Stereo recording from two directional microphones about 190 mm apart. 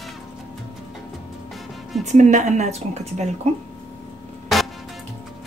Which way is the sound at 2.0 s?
40° right (ahead or behind).